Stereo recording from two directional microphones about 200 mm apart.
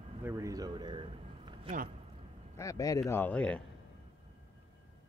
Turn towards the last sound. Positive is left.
turn(degrees=5)  # may be behind; listen again after turning